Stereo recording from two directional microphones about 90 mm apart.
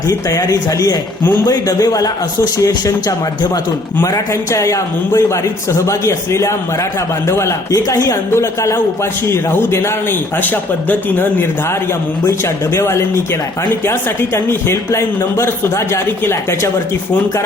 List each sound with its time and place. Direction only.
0.1 s a man's voice: 40° left (ahead or behind)
4.0 s a man's voice: 35° left (ahead or behind); by 11.4 s 20° left (ahead or behind)
12.7 s a man's voice: 30° left (ahead or behind)